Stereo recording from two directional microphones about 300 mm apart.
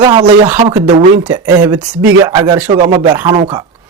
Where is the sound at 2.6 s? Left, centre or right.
Right.